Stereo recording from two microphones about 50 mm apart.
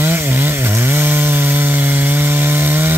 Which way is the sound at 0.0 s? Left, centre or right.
Right.